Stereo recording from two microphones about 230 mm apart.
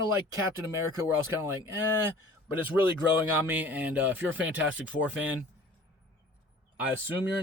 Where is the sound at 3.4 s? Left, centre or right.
Centre.